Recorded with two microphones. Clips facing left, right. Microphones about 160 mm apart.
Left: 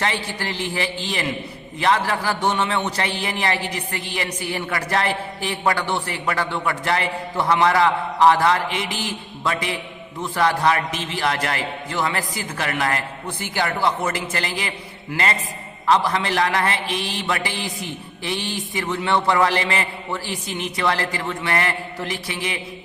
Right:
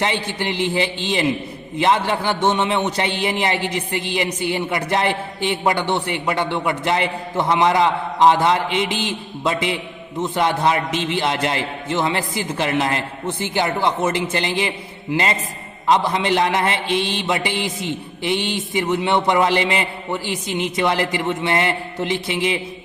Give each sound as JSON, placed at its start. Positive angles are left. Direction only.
{"t": 0.0, "sound": "a man's voice", "side_deg": -20}